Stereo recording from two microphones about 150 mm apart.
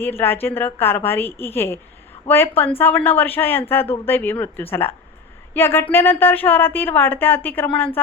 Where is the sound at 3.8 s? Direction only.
40° left (ahead or behind).